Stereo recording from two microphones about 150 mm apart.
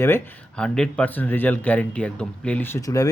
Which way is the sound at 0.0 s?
10° left (ahead or behind).